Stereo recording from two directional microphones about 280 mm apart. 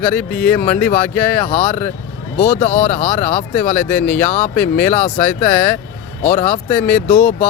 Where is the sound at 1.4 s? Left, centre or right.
Left.